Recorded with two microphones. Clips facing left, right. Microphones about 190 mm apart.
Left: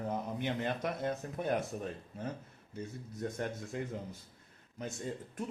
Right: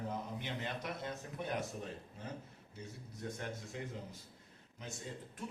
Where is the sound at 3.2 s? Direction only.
50° left (ahead or behind).